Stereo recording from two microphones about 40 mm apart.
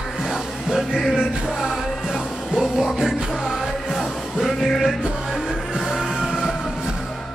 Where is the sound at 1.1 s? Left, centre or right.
Centre.